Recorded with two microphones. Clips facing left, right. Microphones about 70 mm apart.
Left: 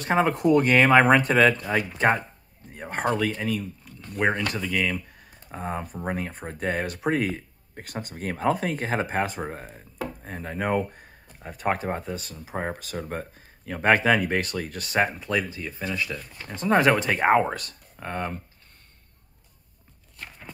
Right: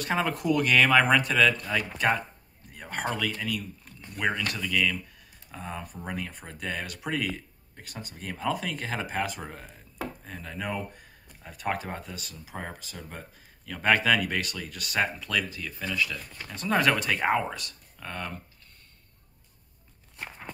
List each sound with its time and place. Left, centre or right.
0.0 s speech: left
12.7 s speech: left
13.7 s speech: left